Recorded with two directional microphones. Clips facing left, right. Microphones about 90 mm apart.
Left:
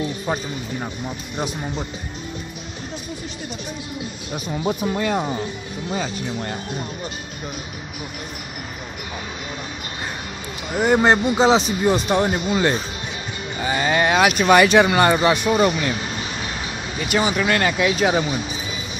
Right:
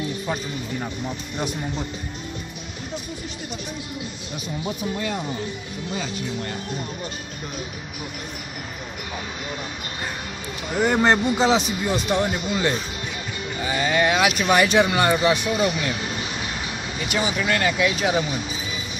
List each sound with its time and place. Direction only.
4.8 s speech: 65° left (ahead or behind)
5.9 s speech: 40° left (ahead or behind)
10.7 s speech: 15° left (ahead or behind)
11.3 s speech: 25° left (ahead or behind)
11.8 s speech: 40° left (ahead or behind)
14.5 s speech: 75° left (ahead or behind); by 15.9 s 50° left (ahead or behind)
17.1 s speech: 55° left (ahead or behind)